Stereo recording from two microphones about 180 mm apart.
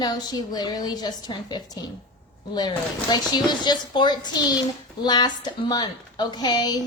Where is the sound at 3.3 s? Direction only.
25° left (ahead or behind).